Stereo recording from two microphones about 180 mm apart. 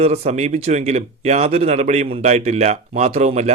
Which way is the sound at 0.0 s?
35° right (ahead or behind).